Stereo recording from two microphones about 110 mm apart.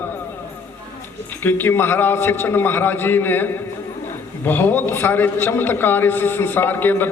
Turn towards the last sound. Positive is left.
turn(degrees=20)  # may be behind; listen again after turning